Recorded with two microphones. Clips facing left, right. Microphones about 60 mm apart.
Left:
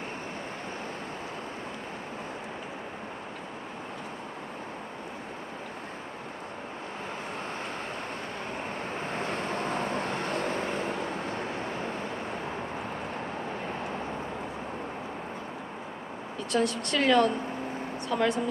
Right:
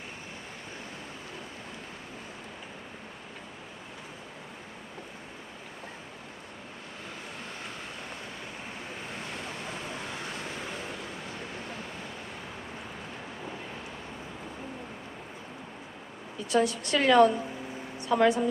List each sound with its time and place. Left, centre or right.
8.9 s vehicle: left
16.5 s a woman's voice: centre